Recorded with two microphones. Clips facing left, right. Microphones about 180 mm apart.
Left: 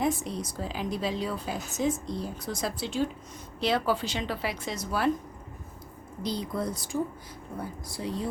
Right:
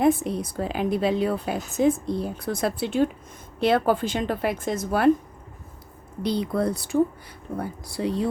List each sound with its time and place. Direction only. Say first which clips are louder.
0.0 s a woman's voice: right 8 dB; 55° right (ahead or behind)
6.2 s a woman's voice: right 7 dB; 65° right (ahead or behind)